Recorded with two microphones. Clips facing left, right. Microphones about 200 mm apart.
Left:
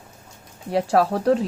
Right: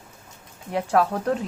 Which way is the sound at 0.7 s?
35° left (ahead or behind).